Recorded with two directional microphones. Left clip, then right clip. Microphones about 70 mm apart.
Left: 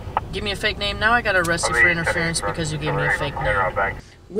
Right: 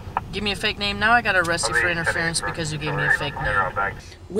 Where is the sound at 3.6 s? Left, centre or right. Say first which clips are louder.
Left 2 dB; left.